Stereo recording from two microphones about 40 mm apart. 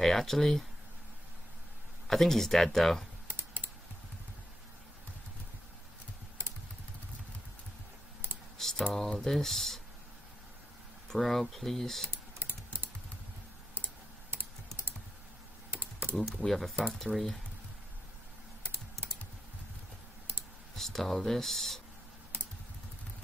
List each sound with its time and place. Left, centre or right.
0.0 s speech: centre
2.0 s speech: centre
3.3 s computer keyboard: right
8.5 s typing: centre
9.2 s speech: centre
11.1 s speech: centre
12.1 s typing: right
14.3 s typing: right
15.8 s typing: right
16.4 s speech: centre
20.7 s speech: centre